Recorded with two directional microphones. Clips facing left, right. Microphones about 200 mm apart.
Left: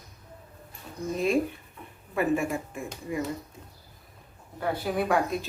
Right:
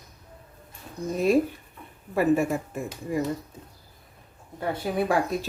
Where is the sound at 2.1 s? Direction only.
35° right (ahead or behind).